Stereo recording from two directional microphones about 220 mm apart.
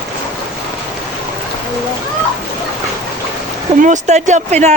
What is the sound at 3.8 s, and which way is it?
Speech, 30° right (ahead or behind).